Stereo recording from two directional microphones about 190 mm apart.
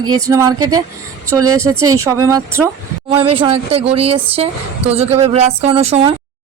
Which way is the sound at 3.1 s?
30° right (ahead or behind).